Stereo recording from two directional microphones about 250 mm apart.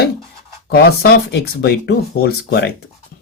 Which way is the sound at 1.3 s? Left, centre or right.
Left.